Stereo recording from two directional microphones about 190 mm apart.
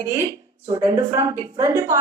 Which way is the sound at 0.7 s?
15° right (ahead or behind).